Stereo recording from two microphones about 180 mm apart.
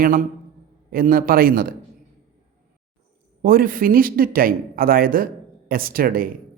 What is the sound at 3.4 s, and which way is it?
Speech, 55° right (ahead or behind).